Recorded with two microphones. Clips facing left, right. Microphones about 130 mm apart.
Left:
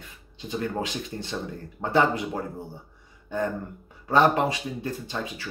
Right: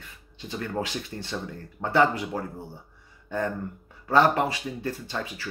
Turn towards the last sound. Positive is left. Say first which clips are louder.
# left 1 dB
turn(degrees=20)  # may be behind; listen again after turning